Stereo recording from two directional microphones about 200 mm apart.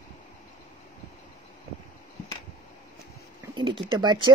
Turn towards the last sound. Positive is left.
turn(degrees=-25)  # may be behind; listen again after turning